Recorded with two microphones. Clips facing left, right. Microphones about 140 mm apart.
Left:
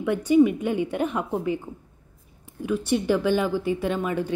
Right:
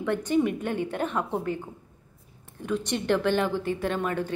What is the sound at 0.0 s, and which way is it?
A woman's voice, 10° left (ahead or behind).